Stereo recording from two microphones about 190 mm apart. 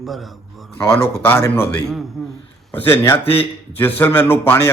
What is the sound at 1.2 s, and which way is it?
A man's voice, 10° left (ahead or behind).